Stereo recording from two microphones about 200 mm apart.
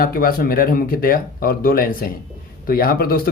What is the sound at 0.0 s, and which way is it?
Speech, 50° left (ahead or behind).